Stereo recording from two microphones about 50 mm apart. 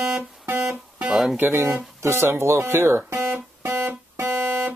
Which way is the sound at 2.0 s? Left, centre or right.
Right.